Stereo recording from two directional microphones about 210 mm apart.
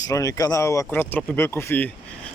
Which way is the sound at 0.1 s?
15° left (ahead or behind).